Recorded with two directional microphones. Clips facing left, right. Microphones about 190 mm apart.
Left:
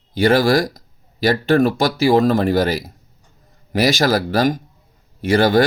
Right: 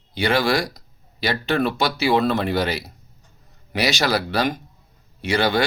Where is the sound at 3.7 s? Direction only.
50° left (ahead or behind).